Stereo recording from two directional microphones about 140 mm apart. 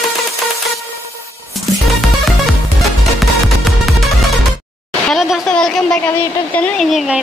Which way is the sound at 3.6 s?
Centre (ahead or behind).